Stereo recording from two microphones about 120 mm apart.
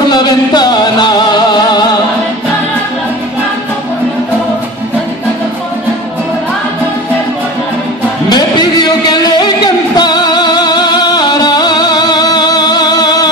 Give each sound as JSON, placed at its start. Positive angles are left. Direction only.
{"t": 0.1, "sound": "music", "side_deg": 35}
{"t": 8.3, "sound": "music", "side_deg": 35}